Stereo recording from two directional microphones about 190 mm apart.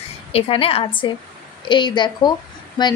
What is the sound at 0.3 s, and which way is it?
A woman's voice, 30° left (ahead or behind).